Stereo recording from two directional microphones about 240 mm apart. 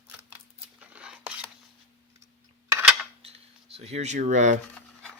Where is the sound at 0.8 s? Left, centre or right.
Centre.